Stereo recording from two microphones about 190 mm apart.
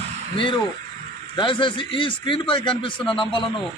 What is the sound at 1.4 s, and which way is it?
A man's voice, 25° left (ahead or behind).